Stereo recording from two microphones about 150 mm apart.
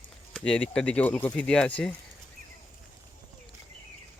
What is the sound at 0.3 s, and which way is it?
Speech, 5° left (ahead or behind).